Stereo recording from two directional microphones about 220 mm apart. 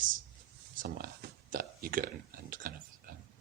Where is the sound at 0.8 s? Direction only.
40° right (ahead or behind).